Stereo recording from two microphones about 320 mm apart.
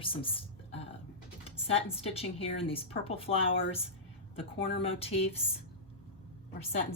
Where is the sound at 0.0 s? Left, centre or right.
Centre.